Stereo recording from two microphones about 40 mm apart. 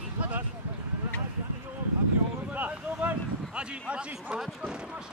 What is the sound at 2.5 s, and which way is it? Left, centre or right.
Speech, right.